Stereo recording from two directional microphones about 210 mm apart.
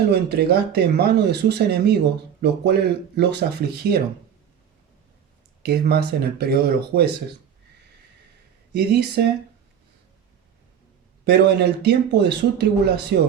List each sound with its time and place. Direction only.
0.1 s speech: 50° right (ahead or behind)
5.6 s speech: 50° right (ahead or behind)
8.7 s speech: 50° right (ahead or behind)
11.3 s speech: 50° right (ahead or behind)